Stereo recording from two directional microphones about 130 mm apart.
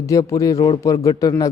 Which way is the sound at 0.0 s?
25° left (ahead or behind).